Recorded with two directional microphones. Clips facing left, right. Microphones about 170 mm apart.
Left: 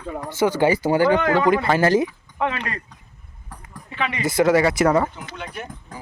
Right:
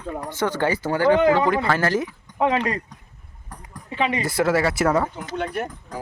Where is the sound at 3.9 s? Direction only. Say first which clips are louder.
Right 3 dB; 35° right (ahead or behind).